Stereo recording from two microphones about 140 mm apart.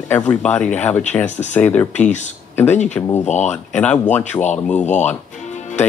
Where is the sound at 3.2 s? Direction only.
55° left (ahead or behind).